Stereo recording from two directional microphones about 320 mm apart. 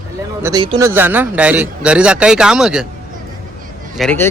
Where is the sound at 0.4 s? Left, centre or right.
Centre.